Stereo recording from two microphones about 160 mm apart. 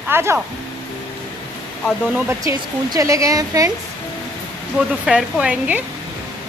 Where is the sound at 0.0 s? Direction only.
15° right (ahead or behind).